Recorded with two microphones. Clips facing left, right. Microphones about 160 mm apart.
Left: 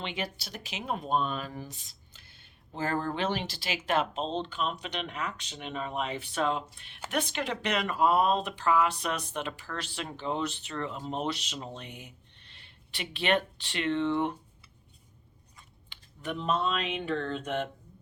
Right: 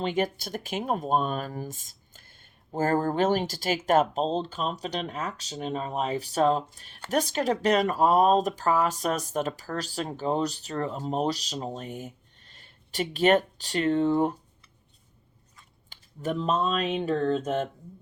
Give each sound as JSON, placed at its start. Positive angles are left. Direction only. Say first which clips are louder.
{"t": 0.0, "sound": "speech", "louder": "right 9 dB", "side_deg": -45}
{"t": 15.9, "sound": "speech", "louder": "right 6 dB", "side_deg": -40}